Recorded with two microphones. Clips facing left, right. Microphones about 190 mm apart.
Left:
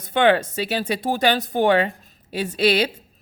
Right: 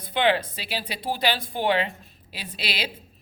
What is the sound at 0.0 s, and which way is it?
Speech, 45° left (ahead or behind).